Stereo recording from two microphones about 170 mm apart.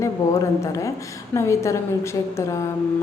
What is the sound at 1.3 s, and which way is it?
Speech, 15° left (ahead or behind).